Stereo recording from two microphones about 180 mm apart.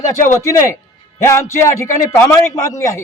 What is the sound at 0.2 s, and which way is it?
A man's voice, 15° left (ahead or behind).